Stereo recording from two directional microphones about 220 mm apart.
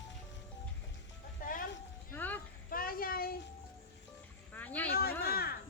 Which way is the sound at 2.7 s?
40° left (ahead or behind).